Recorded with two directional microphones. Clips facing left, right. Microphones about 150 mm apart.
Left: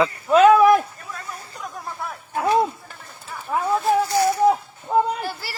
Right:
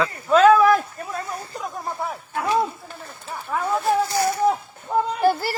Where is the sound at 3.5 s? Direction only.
15° left (ahead or behind).